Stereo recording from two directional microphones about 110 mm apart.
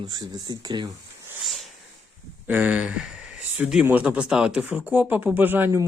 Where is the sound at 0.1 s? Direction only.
35° right (ahead or behind).